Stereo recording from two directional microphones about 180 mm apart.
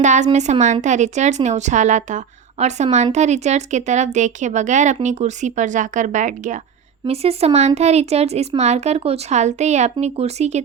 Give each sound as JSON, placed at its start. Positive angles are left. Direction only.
{"t": 0.0, "sound": "speech", "side_deg": -40}